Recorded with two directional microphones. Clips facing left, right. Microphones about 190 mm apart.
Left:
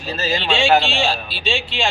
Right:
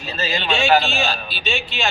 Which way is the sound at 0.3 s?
30° left (ahead or behind).